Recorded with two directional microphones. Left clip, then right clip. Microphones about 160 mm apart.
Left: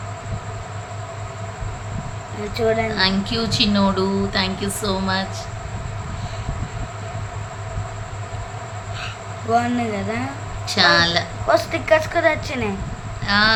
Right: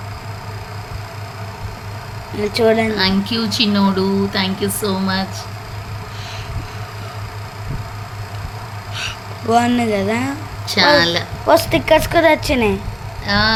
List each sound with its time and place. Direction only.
2.5 s a woman's voice: 70° right (ahead or behind)
2.9 s speech: 25° right (ahead or behind)
9.0 s a sound: 70° right (ahead or behind)
10.7 s speech: 25° right (ahead or behind)
11.4 s a woman's voice: 50° right (ahead or behind)
13.2 s speech: 25° right (ahead or behind)